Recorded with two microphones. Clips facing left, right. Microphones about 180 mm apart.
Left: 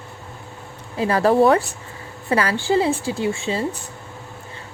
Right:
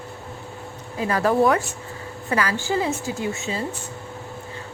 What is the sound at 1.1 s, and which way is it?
Speech, 35° left (ahead or behind).